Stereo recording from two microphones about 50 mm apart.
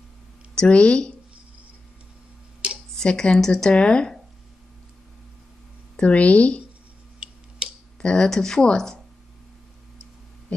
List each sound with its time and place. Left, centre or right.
0.6 s a woman's voice: left
2.6 s a sound: centre
3.0 s a woman's voice: centre
5.9 s a woman's voice: left
7.2 s tick-tock: centre
8.0 s a woman's voice: left